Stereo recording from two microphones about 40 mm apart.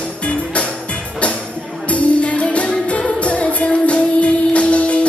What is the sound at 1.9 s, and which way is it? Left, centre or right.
Music, left.